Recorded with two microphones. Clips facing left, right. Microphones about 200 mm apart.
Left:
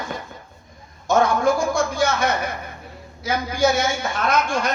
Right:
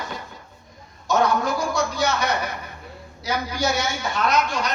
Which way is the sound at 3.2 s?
50° left (ahead or behind).